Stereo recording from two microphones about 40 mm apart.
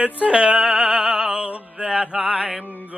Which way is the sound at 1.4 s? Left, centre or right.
Right.